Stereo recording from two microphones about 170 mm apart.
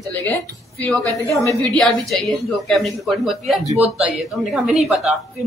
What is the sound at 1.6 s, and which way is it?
A woman's voice, 5° left (ahead or behind).